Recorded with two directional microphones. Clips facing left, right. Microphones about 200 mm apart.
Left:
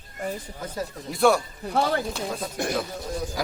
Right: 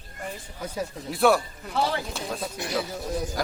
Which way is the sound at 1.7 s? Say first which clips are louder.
Left 3 dB; 50° left (ahead or behind).